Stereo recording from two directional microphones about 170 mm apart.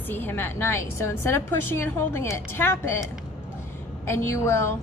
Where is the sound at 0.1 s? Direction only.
10° left (ahead or behind).